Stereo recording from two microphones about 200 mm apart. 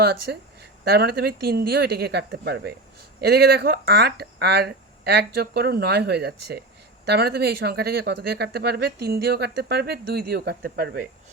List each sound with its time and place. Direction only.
0.0 s speech: 55° right (ahead or behind)